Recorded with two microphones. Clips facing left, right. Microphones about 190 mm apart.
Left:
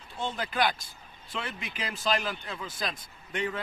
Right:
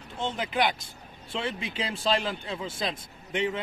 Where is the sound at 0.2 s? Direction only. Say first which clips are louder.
Right 2 dB; 20° right (ahead or behind).